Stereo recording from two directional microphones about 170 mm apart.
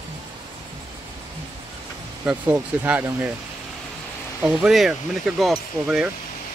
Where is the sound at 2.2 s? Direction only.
10° right (ahead or behind).